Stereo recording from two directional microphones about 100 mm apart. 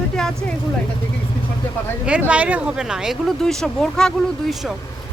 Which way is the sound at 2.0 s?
10° right (ahead or behind).